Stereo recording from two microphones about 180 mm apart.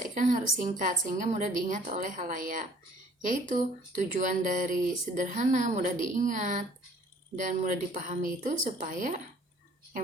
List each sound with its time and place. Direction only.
0.0 s speech: 45° right (ahead or behind)